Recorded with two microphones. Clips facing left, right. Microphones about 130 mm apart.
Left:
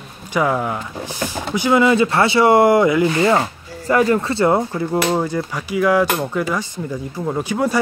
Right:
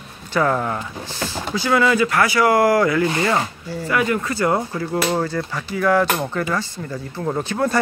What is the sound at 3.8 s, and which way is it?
Speech, 35° left (ahead or behind).